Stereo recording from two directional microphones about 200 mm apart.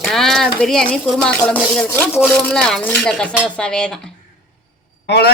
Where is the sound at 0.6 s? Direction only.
5° left (ahead or behind).